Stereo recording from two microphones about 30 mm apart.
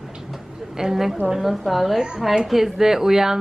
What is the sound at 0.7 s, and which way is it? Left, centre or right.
Speech, centre.